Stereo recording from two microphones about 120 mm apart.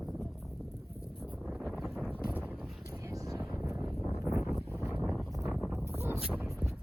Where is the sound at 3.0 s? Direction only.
25° right (ahead or behind).